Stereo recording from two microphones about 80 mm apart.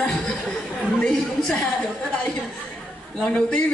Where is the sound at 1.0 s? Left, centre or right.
Centre.